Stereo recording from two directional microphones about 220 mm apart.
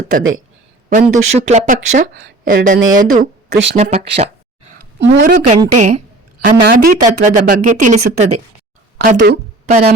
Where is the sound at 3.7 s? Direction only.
30° right (ahead or behind).